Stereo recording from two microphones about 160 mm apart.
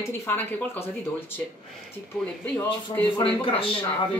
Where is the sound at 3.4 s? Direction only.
35° left (ahead or behind).